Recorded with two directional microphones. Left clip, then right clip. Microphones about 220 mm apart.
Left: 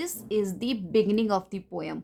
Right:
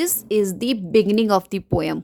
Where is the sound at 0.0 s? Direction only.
35° right (ahead or behind).